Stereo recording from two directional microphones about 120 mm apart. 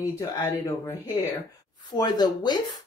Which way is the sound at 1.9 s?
35° left (ahead or behind).